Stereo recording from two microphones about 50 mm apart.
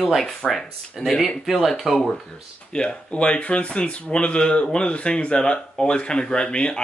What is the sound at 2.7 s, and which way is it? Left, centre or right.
Speech, left.